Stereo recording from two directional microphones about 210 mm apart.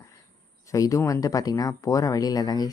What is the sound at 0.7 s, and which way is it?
Speech, 15° left (ahead or behind).